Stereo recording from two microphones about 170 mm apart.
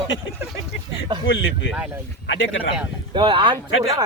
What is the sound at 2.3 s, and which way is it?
Speech, 90° left.